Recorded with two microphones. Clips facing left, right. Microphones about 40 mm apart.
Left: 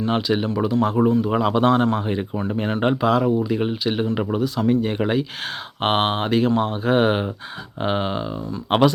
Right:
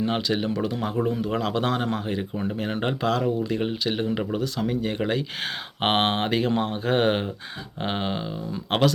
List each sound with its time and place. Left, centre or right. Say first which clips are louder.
0.1 s speech: left 4 dB; centre
1.2 s speech: left 6 dB; centre
2.0 s speech: left 4 dB; centre
5.4 s speech: left 2 dB; centre